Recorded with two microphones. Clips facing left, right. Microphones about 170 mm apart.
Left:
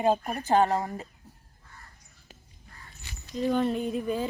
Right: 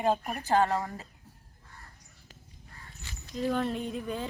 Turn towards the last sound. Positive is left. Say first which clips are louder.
# left 5 dB
turn(degrees=0)  # may be behind; listen again after turning